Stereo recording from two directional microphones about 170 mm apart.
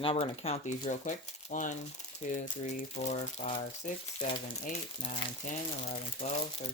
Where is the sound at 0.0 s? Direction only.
35° left (ahead or behind).